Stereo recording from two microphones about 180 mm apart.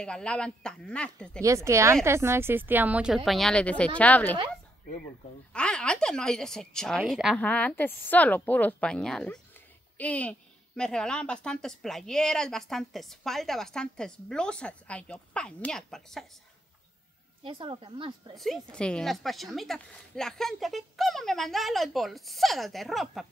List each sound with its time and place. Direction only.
0.0 s a woman's voice: 5° left (ahead or behind)
1.4 s a woman's voice: 15° right (ahead or behind); by 4.4 s 10° left (ahead or behind)
5.5 s a woman's voice: 5° left (ahead or behind)
7.3 s a woman's voice: 10° left (ahead or behind)
17.4 s a woman's voice: 30° right (ahead or behind)
18.3 s a woman's voice: centre (ahead or behind)